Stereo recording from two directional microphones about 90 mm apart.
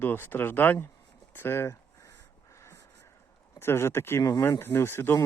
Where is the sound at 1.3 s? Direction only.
25° left (ahead or behind).